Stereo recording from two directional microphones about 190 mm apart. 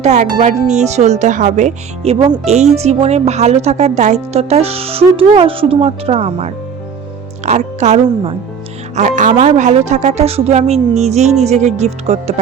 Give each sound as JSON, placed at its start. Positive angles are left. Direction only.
{"t": 0.0, "sound": "a woman's voice", "side_deg": -40}
{"t": 9.0, "sound": "a woman's voice", "side_deg": -40}